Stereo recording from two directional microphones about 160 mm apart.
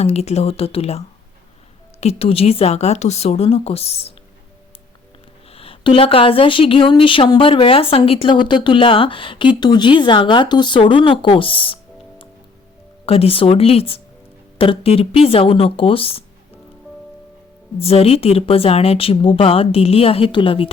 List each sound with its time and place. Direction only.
0.0 s speech: 40° left (ahead or behind)
5.5 s speech: 35° left (ahead or behind)
13.1 s speech: 35° left (ahead or behind)
17.7 s speech: 40° left (ahead or behind)